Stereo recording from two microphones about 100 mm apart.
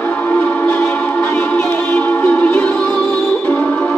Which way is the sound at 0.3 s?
10° left (ahead or behind).